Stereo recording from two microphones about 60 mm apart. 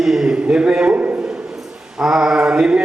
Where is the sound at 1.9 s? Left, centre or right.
Centre.